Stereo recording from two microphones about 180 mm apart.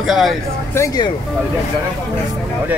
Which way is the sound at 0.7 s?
20° left (ahead or behind).